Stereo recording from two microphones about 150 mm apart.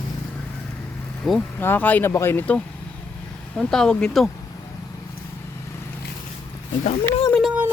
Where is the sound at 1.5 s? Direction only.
15° left (ahead or behind).